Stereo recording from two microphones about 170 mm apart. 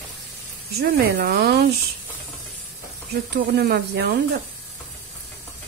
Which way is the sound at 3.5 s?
70° right (ahead or behind).